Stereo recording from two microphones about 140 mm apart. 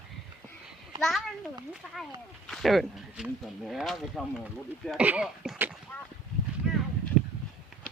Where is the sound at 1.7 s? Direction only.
Centre (ahead or behind).